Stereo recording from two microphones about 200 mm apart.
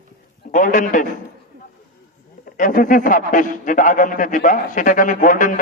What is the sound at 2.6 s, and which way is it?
A man's voice, 40° left (ahead or behind).